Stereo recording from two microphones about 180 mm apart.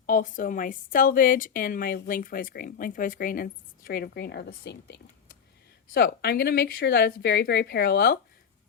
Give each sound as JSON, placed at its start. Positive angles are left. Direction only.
{"t": 0.0, "sound": "a woman's voice", "side_deg": 50}